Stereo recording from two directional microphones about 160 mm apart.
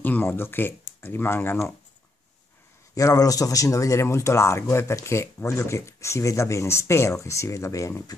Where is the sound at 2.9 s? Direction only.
20° left (ahead or behind).